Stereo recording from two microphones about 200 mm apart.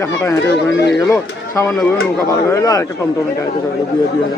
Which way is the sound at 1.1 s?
15° left (ahead or behind).